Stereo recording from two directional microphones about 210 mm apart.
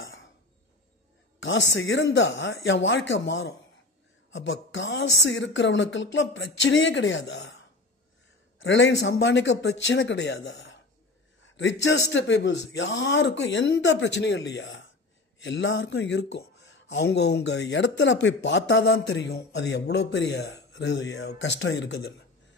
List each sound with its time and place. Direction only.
0.0 s a sound: 65° left (ahead or behind)
1.4 s a man's voice: 60° left (ahead or behind)
8.5 s a man's voice: 60° left (ahead or behind)